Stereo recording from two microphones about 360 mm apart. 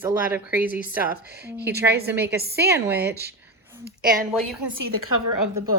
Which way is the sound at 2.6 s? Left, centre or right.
Centre.